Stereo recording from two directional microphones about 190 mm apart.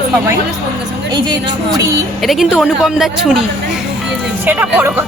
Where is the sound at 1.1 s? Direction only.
20° right (ahead or behind).